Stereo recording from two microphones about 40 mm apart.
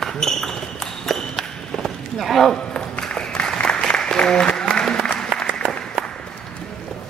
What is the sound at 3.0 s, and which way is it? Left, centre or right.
Applause, left.